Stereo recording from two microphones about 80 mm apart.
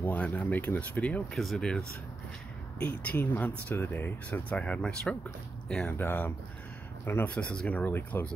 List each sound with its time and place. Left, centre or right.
0.0 s speech: left
1.3 s speech: centre
2.8 s speech: centre
5.9 s speech: left